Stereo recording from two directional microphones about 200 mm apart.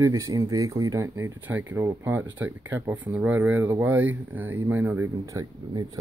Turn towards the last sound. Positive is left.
turn(degrees=-20)  # may be behind; listen again after turning